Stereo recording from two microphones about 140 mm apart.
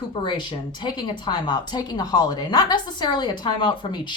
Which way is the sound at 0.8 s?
30° left (ahead or behind).